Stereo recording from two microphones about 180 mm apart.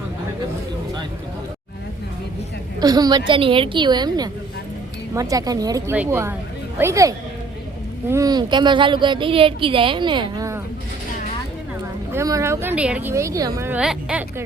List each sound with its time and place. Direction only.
2.8 s speech: 20° right (ahead or behind)
12.1 s speech: 15° right (ahead or behind)